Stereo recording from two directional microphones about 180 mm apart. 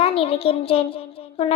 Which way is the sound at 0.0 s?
30° left (ahead or behind).